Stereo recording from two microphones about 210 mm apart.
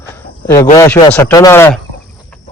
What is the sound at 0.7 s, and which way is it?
A man's voice, 15° left (ahead or behind).